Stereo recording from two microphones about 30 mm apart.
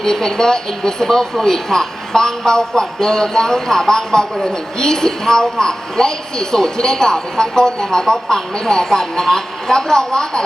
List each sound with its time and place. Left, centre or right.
0.0 s a man's voice: centre